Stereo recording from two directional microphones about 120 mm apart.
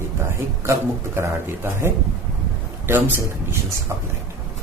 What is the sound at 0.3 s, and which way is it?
Speech, 25° right (ahead or behind).